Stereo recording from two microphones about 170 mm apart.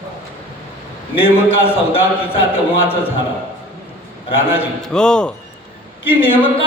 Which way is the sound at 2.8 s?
10° left (ahead or behind).